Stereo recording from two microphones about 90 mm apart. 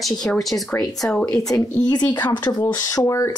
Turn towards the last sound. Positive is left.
turn(degrees=35)  # may be behind; listen again after turning